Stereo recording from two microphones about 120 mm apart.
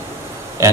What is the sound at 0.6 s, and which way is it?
Speech, 25° right (ahead or behind).